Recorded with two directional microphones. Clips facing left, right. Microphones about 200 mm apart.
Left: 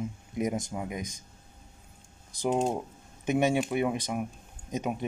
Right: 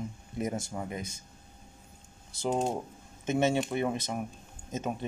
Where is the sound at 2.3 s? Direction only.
15° left (ahead or behind).